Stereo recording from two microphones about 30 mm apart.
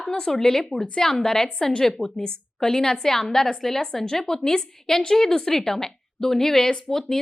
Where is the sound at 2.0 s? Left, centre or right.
Left.